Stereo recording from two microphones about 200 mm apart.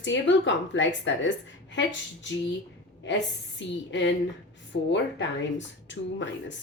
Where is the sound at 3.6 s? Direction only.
65° left (ahead or behind).